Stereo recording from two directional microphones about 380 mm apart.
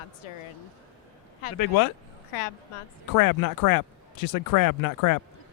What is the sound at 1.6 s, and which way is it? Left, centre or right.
Speech, left.